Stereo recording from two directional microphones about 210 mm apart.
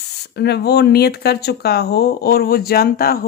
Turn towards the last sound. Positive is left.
turn(degrees=45)  # may be behind; listen again after turning